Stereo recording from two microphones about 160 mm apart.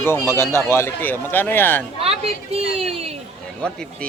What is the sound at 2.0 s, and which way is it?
A woman's voice, 40° right (ahead or behind).